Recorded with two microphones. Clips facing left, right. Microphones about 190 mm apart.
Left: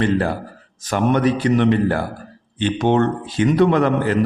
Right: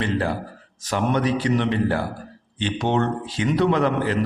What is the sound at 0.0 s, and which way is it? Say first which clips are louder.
A man's voice: left 5 dB; 50° left (ahead or behind).